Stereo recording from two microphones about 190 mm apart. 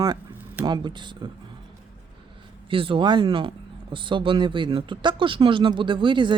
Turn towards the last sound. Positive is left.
turn(degrees=-25)  # may be behind; listen again after turning